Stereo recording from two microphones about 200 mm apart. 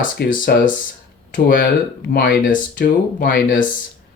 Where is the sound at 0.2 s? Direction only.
45° left (ahead or behind).